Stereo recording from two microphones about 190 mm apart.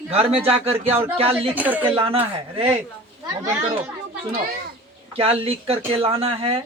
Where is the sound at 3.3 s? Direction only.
15° right (ahead or behind).